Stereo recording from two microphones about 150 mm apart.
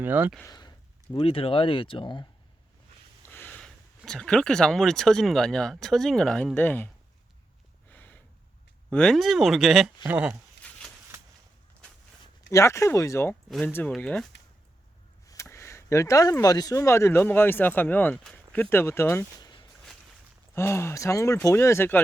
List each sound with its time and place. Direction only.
0.0 s speech: 10° right (ahead or behind)
0.4 s speech: 25° left (ahead or behind)
1.1 s speech: 40° left (ahead or behind)
3.2 s speech: 10° left (ahead or behind)
7.9 s a sound: 10° left (ahead or behind)
8.9 s speech: 5° left (ahead or behind)
10.6 s a sound: 10° left (ahead or behind)
12.5 s speech: 20° left (ahead or behind)
13.5 s speech: 5° left (ahead or behind)
15.3 s speech: 20° left (ahead or behind)
20.6 s speech: 15° left (ahead or behind)